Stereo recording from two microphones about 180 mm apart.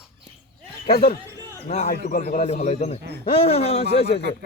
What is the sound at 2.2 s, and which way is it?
Speech, 35° left (ahead or behind).